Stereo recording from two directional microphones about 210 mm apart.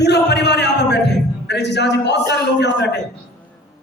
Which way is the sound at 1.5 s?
55° left (ahead or behind).